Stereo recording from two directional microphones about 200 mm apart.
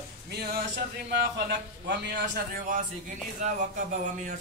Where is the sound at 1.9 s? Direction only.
60° right (ahead or behind).